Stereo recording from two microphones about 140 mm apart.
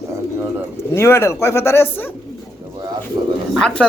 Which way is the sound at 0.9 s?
20° left (ahead or behind).